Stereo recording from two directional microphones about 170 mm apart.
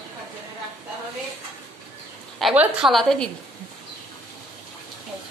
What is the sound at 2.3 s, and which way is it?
Speech, 5° right (ahead or behind).